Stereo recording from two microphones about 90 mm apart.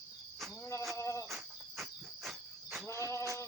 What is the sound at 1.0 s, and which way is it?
Cricket, 30° left (ahead or behind).